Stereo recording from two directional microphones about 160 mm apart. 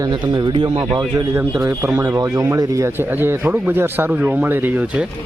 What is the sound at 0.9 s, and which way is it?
Speech, 20° right (ahead or behind).